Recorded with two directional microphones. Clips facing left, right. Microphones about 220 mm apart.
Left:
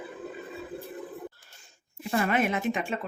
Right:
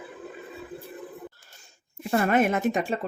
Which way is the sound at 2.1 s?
45° right (ahead or behind).